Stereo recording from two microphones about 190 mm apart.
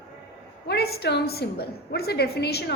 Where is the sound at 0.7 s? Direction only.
55° left (ahead or behind).